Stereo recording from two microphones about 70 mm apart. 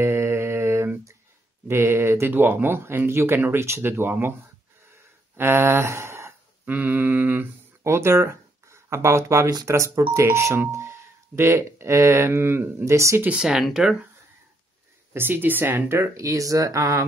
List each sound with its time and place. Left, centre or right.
0.0 s mantra: right
1.7 s speech: right
5.4 s a sound: right
6.6 s mantra: right
7.8 s speech: right
13.2 s speech: centre
15.1 s speech: right
16.3 s speech: right